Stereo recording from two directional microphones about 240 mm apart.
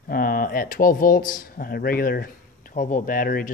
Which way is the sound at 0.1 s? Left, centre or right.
Left.